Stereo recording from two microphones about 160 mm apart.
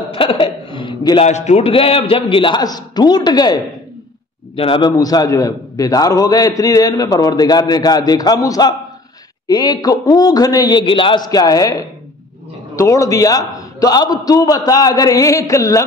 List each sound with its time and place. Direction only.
0.1 s a man's voice: 35° left (ahead or behind)
0.7 s a sound: 30° left (ahead or behind)
1.2 s a man's voice: 45° left (ahead or behind); by 15.8 s 20° left (ahead or behind)